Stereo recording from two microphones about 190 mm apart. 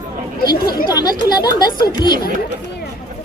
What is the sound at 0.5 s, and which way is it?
Speech, 55° left (ahead or behind).